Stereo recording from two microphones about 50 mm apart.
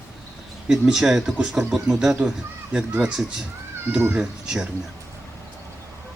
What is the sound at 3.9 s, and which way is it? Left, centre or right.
Speech, centre.